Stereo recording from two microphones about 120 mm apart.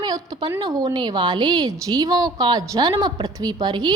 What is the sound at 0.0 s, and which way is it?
A woman's voice, 35° right (ahead or behind).